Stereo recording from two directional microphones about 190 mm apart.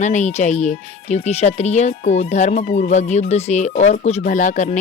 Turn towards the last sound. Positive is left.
turn(degrees=40)  # may be behind; listen again after turning